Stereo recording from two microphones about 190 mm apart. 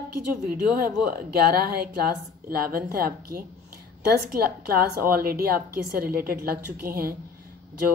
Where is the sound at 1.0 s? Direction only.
50° right (ahead or behind).